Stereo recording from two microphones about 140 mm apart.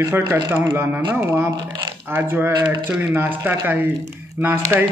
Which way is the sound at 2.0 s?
15° right (ahead or behind).